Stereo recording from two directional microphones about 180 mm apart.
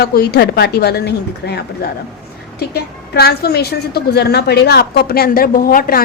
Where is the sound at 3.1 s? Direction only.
65° left (ahead or behind).